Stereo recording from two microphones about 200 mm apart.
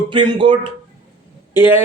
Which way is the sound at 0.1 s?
25° right (ahead or behind).